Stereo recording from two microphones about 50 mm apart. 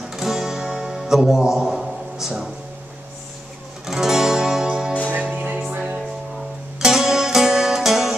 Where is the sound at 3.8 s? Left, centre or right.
Centre.